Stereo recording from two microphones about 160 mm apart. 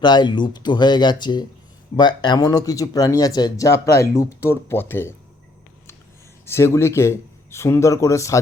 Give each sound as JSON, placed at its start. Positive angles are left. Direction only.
{"t": 0.0, "sound": "speech", "side_deg": 30}
{"t": 6.4, "sound": "speech", "side_deg": 15}